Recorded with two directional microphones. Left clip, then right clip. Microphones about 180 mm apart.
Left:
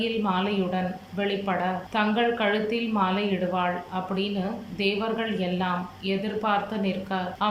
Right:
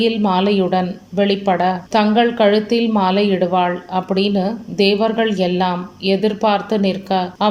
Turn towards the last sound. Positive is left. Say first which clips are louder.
# right 10 dB
turn(degrees=-55)  # may be behind; listen again after turning